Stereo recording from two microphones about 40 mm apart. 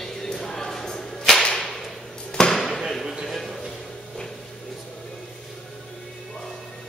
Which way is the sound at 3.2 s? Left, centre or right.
Centre.